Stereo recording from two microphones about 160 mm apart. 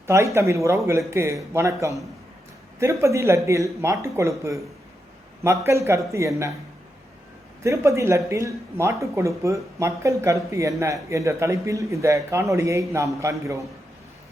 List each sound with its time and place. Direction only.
0.3 s a man's voice: 20° right (ahead or behind)
7.6 s speech: 20° right (ahead or behind)